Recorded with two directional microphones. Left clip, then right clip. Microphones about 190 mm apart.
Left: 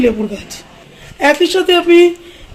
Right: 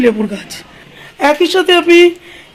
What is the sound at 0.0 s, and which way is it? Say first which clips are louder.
Speech: right 2 dB; 45° right (ahead or behind).